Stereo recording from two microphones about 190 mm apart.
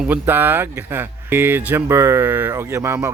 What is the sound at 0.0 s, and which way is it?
Speech, 10° right (ahead or behind).